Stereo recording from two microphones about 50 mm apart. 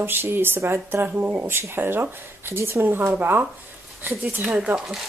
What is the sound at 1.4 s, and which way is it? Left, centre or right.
Speech, right.